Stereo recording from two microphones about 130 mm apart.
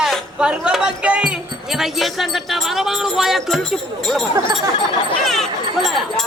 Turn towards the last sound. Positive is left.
turn(degrees=0)  # may be behind; listen again after turning